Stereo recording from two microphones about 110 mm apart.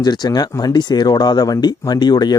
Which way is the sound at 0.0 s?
40° left (ahead or behind).